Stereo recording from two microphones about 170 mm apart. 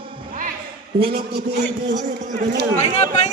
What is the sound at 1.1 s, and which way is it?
Speech, 70° right (ahead or behind).